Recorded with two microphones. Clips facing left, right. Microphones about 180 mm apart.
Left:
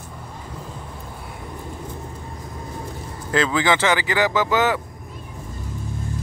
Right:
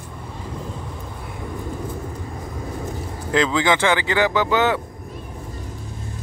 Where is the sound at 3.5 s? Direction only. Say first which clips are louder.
Right 1 dB; 20° right (ahead or behind).